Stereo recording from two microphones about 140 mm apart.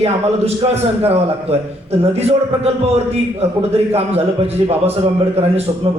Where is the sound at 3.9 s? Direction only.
45° right (ahead or behind).